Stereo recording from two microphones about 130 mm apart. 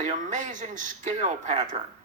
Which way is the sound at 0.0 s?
65° right (ahead or behind).